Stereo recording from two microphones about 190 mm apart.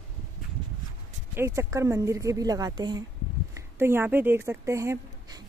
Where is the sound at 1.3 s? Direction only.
15° right (ahead or behind).